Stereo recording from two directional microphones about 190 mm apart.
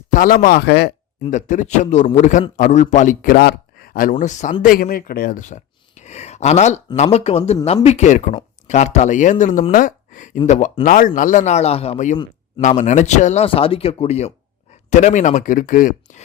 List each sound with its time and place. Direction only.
0.1 s speech: 45° left (ahead or behind)
1.2 s speech: 40° left (ahead or behind)
12.1 s a sound: 25° left (ahead or behind)
12.6 s speech: 40° left (ahead or behind)